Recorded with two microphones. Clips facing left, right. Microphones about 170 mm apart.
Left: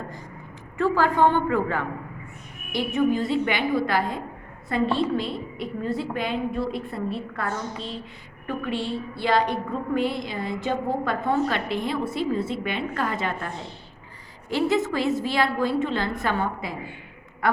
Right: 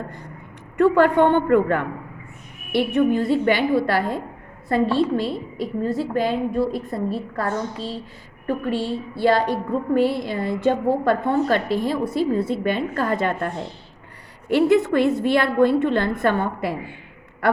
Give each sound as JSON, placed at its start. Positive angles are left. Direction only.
{"t": 0.8, "sound": "a woman's voice", "side_deg": -60}